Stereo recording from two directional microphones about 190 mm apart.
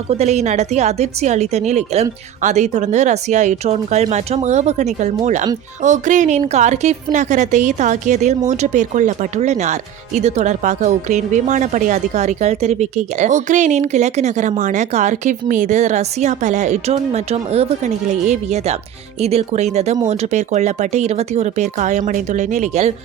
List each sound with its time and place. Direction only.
0.1 s speech: 35° right (ahead or behind)